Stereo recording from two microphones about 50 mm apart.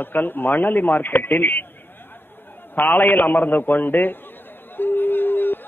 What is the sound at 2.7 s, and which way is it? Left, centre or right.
A man's voice, left.